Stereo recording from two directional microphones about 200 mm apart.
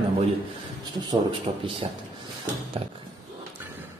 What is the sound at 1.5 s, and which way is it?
Speech, 30° right (ahead or behind).